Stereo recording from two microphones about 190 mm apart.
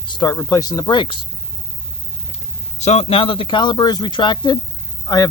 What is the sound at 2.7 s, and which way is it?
Speech, 35° left (ahead or behind).